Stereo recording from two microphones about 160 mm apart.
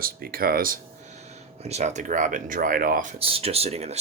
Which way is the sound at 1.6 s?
45° right (ahead or behind).